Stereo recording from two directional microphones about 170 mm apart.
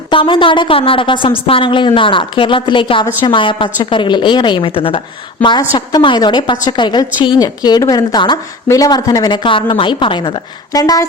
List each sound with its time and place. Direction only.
0.1 s a woman's voice: 30° left (ahead or behind)